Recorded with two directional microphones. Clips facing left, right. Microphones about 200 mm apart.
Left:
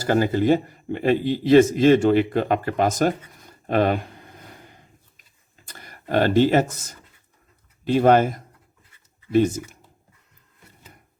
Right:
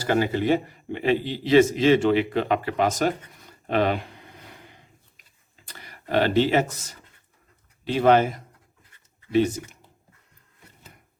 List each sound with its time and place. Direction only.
0.0 s a man's voice: 45° left (ahead or behind)
3.7 s a sound: 45° left (ahead or behind)
5.6 s a man's voice: 45° left (ahead or behind)